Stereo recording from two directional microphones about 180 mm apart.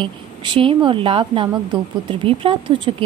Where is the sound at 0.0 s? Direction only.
30° right (ahead or behind).